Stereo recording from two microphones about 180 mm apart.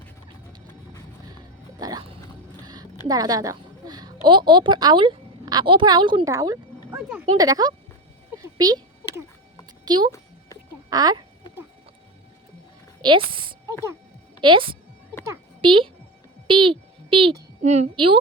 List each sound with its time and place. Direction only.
1.8 s music: 25° right (ahead or behind)
3.1 s a sound: 20° right (ahead or behind)
4.3 s a woman's voice: 25° right (ahead or behind)
8.4 s a sound: 20° right (ahead or behind)
9.8 s speech: 25° right (ahead or behind)
13.0 s a woman's voice: 30° right (ahead or behind)